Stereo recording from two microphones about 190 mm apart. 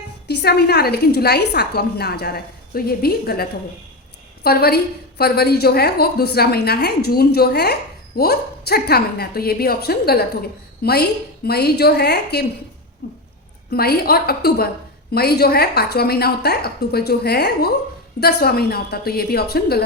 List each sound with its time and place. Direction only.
0.3 s a woman's voice: 60° left (ahead or behind)
4.4 s a woman's voice: 55° left (ahead or behind)
13.0 s a sound: 55° left (ahead or behind)
13.7 s a woman's voice: 55° left (ahead or behind)